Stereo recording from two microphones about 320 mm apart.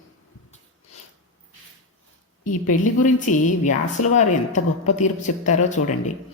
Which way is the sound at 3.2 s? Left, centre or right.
Left.